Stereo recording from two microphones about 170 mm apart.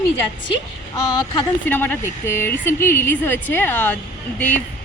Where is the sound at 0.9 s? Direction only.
25° left (ahead or behind).